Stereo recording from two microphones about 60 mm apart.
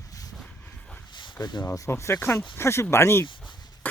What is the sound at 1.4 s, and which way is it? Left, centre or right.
Speech, left.